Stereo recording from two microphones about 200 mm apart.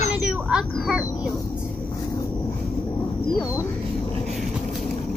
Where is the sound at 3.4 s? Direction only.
15° left (ahead or behind).